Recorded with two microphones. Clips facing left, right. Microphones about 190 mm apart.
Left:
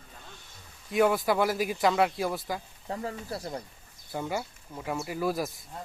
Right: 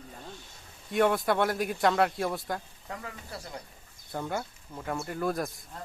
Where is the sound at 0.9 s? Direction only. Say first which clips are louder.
Left 1 dB; centre (ahead or behind).